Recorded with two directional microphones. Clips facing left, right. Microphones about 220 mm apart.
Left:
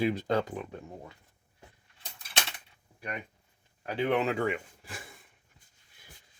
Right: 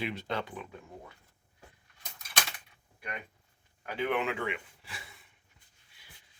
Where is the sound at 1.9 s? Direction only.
30° left (ahead or behind).